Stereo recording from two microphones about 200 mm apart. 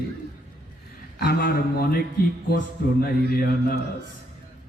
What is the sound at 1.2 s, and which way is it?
Mantra, 50° left (ahead or behind).